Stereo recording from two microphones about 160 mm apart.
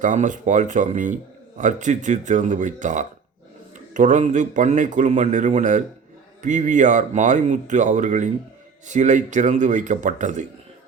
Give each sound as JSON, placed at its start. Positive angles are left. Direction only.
{"t": 0.0, "sound": "speech", "side_deg": -50}